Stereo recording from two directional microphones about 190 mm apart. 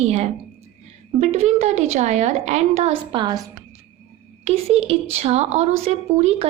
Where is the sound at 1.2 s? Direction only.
35° right (ahead or behind).